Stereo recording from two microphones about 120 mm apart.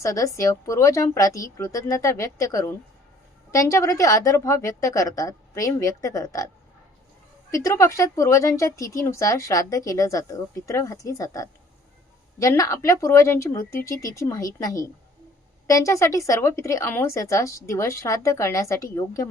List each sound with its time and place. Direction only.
0.0 s a woman's voice: 25° left (ahead or behind)
7.5 s a woman's voice: 25° left (ahead or behind)